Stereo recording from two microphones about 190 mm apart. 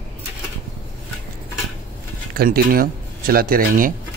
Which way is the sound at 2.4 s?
50° right (ahead or behind).